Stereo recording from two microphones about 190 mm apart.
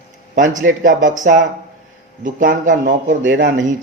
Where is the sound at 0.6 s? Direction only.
45° right (ahead or behind).